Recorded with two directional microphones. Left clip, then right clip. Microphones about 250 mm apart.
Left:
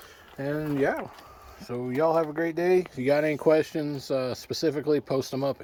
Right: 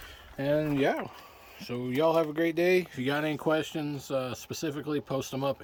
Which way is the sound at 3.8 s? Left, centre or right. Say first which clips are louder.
Left 3 dB; centre.